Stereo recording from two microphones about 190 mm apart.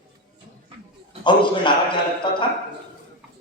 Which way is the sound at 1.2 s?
25° left (ahead or behind).